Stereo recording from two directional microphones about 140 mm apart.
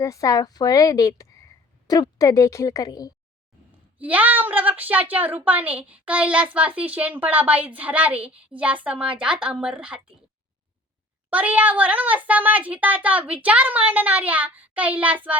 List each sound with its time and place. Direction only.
0.0 s a woman's voice: 25° left (ahead or behind)
3.9 s a woman's voice: 10° right (ahead or behind)
11.3 s a woman's voice: 10° right (ahead or behind)